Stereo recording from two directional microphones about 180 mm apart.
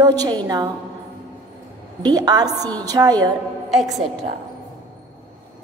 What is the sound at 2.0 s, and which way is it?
Speech, 20° right (ahead or behind).